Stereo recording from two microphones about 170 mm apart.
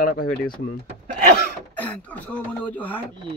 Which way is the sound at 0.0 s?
60° left (ahead or behind).